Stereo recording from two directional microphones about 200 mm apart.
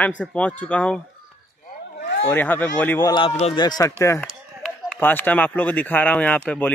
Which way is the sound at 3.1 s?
25° left (ahead or behind).